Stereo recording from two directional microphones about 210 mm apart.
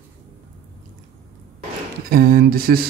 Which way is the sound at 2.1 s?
45° right (ahead or behind).